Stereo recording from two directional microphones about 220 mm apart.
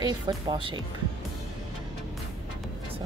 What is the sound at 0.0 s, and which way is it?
Speech, 20° right (ahead or behind).